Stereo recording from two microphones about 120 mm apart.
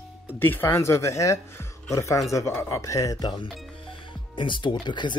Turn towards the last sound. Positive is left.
turn(degrees=40)  # may be behind; listen again after turning